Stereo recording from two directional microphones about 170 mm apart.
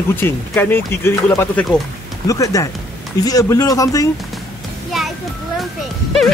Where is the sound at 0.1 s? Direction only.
15° left (ahead or behind).